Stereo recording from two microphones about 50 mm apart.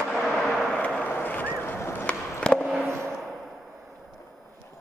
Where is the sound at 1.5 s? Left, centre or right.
Left.